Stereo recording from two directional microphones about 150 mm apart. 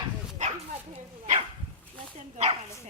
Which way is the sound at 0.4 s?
55° right (ahead or behind).